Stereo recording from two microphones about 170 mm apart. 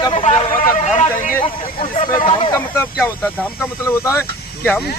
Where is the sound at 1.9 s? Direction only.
30° left (ahead or behind).